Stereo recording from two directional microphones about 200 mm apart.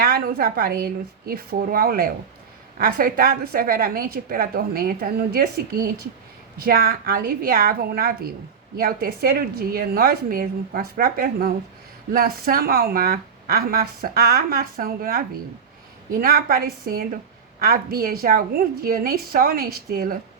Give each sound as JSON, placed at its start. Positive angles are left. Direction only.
{"t": 0.0, "sound": "a woman's voice", "side_deg": -50}
{"t": 16.2, "sound": "a woman's voice", "side_deg": -45}